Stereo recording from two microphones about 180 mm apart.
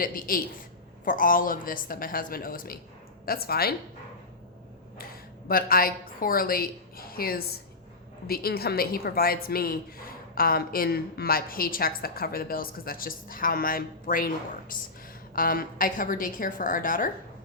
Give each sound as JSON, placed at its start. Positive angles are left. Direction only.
{"t": 0.0, "sound": "a woman's voice", "side_deg": 50}
{"t": 5.5, "sound": "a woman's voice", "side_deg": 55}
{"t": 15.4, "sound": "a woman's voice", "side_deg": 50}